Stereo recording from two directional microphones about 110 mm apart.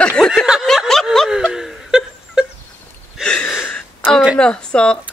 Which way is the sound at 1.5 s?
5° right (ahead or behind).